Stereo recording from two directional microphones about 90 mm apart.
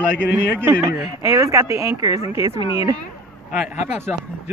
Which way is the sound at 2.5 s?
85° left.